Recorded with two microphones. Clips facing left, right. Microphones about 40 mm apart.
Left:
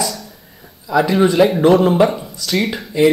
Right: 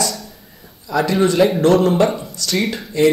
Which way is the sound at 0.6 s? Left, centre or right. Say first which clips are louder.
Left 3 dB; centre.